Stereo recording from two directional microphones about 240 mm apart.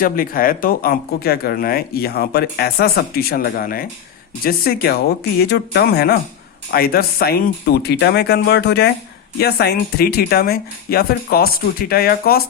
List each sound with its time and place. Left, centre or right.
0.0 s speech: left